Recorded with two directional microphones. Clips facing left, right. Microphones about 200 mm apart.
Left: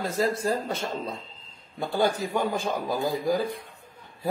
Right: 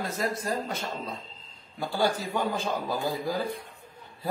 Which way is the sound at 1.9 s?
20° left (ahead or behind).